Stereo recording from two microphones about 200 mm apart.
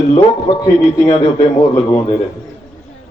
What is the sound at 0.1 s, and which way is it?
Speech, 30° left (ahead or behind).